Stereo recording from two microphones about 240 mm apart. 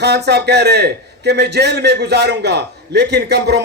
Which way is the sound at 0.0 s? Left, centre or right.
Right.